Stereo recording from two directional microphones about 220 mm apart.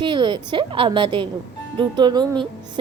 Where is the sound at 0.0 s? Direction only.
20° right (ahead or behind).